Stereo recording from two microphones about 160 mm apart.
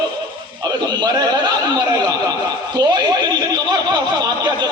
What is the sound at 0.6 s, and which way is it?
A man's voice, 25° right (ahead or behind).